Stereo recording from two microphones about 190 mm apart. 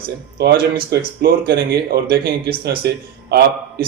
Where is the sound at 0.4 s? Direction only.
60° right (ahead or behind).